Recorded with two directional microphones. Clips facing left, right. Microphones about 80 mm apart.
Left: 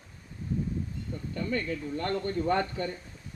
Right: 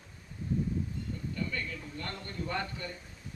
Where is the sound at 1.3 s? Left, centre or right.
Left.